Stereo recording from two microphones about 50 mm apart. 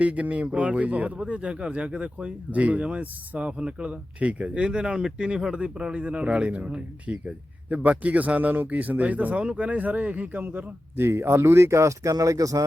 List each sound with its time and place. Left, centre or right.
0.0 s a man's voice: right
9.4 s speech: centre; by 12.4 s right